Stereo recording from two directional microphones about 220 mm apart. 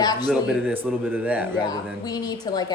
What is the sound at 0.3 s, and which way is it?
A man's voice, 5° right (ahead or behind).